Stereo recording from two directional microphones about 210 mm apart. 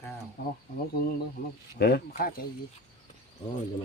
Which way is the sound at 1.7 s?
50° left (ahead or behind).